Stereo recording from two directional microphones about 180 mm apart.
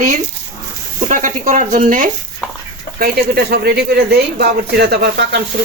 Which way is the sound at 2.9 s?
60° right (ahead or behind).